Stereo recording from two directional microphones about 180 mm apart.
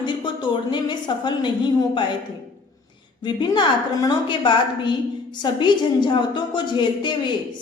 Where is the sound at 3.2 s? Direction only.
25° left (ahead or behind).